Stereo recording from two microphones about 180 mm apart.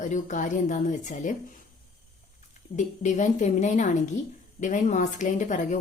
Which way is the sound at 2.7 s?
40° left (ahead or behind).